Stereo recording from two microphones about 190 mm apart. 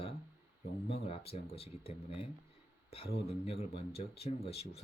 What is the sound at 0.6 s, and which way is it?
Speech, 35° left (ahead or behind).